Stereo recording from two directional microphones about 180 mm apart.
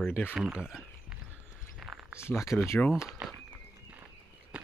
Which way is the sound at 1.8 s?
Centre (ahead or behind).